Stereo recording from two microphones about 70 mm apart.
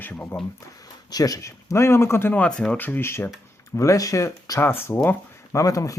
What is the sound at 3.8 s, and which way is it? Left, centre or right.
Speech, left.